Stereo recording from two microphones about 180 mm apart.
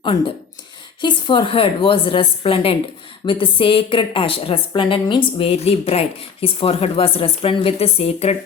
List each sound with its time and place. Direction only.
1.0 s a woman's voice: 25° left (ahead or behind)